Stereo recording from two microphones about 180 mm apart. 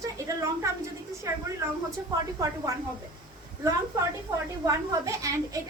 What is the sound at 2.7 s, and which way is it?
A woman's voice, 15° right (ahead or behind).